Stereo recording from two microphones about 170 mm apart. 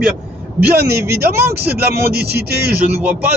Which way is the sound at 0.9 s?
15° right (ahead or behind).